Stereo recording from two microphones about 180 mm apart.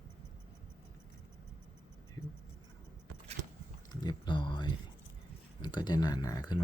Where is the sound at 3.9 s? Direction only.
25° left (ahead or behind).